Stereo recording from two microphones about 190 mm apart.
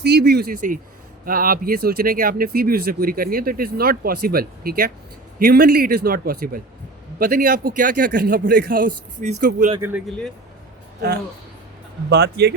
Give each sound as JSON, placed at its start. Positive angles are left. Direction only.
{"t": 0.0, "sound": "speech", "side_deg": -60}
{"t": 10.1, "sound": "speech", "side_deg": 5}
{"t": 12.1, "sound": "speech", "side_deg": -60}